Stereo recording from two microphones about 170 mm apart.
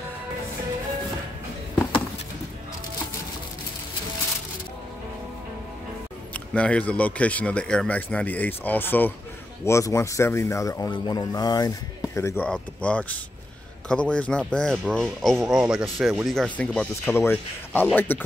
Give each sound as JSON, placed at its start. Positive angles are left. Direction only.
{"t": 6.3, "sound": "speech", "side_deg": 5}